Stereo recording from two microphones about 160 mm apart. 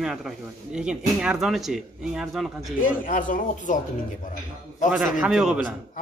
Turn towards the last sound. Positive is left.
turn(degrees=-5)  # may be behind; listen again after turning